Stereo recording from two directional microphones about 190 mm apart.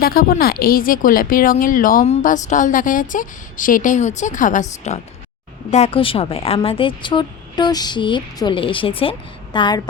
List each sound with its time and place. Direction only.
0.0 s a woman's voice: 50° left (ahead or behind); by 9.8 s 25° left (ahead or behind)